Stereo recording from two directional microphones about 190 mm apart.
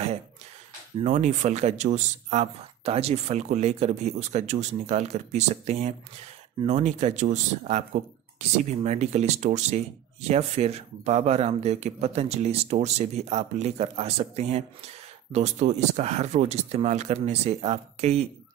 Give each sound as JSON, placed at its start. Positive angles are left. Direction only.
{"t": 1.0, "sound": "speech", "side_deg": -40}